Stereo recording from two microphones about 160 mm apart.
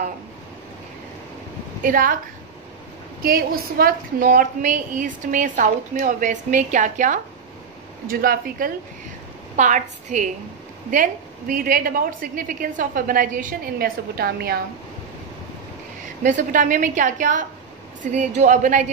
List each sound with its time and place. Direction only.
1.8 s a woman's voice: 60° right (ahead or behind)
3.2 s a woman's voice: 70° right (ahead or behind); by 7.2 s 50° right (ahead or behind)
8.1 s a woman's voice: 65° right (ahead or behind)
9.6 s a woman's voice: 50° right (ahead or behind); by 14.6 s 70° right (ahead or behind)
16.2 s a woman's voice: 55° right (ahead or behind)